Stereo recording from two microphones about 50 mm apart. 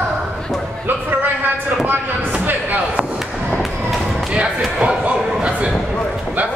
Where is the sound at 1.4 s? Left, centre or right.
Right.